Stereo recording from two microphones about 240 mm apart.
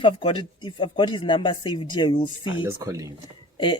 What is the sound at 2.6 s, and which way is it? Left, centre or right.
Speech, centre.